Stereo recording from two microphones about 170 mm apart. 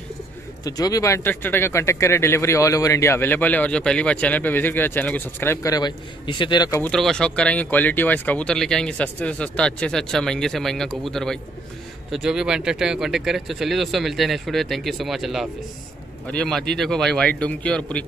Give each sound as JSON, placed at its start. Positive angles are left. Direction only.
{"t": 0.7, "sound": "speech", "side_deg": 20}
{"t": 6.8, "sound": "speech", "side_deg": 5}